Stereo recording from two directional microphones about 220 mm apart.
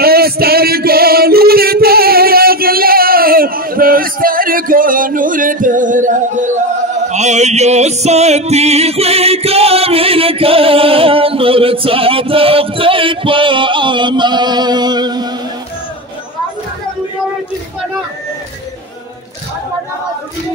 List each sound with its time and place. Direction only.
0.0 s singing: 45° right (ahead or behind)
7.1 s music: 30° right (ahead or behind)